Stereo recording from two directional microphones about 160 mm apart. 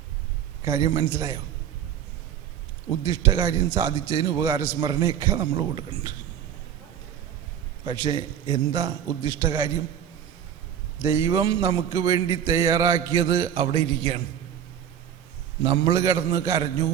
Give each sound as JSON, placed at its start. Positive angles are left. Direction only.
{"t": 0.6, "sound": "a man's voice", "side_deg": -20}
{"t": 3.0, "sound": "a man's voice", "side_deg": -25}
{"t": 7.9, "sound": "a man's voice", "side_deg": -25}
{"t": 11.0, "sound": "a man's voice", "side_deg": -15}
{"t": 15.6, "sound": "a man's voice", "side_deg": -25}